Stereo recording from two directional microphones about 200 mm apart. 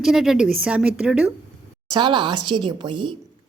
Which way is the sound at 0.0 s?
Centre (ahead or behind).